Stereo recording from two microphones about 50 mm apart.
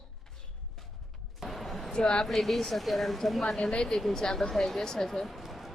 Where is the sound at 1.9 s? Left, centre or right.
Centre.